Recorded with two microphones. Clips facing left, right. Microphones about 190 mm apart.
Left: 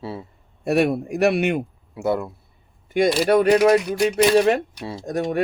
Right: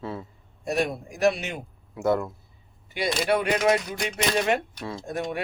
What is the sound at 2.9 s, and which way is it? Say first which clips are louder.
Speech: left 8 dB; 40° left (ahead or behind).